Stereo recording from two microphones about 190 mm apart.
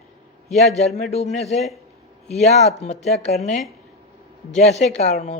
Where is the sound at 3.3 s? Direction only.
Centre (ahead or behind).